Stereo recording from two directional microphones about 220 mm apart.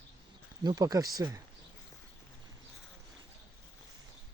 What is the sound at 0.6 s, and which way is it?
Speech, 15° right (ahead or behind).